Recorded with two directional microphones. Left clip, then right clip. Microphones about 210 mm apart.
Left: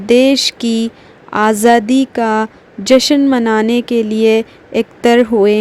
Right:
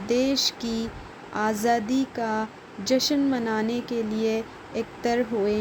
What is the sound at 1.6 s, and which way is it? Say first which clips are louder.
Speech: left 13 dB; 50° left (ahead or behind).